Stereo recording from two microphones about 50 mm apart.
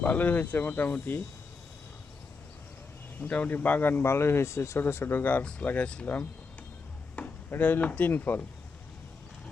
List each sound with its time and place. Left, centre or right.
0.0 s speech: left
3.2 s speech: left
4.0 s speech: left
4.8 s speech: left
7.2 s chop: left
7.5 s speech: left